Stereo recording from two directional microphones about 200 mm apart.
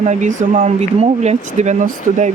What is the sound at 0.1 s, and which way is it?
Speech, 40° right (ahead or behind).